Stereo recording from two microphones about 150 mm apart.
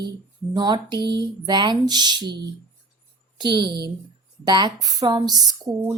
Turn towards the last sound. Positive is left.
turn(degrees=-25)  # may be behind; listen again after turning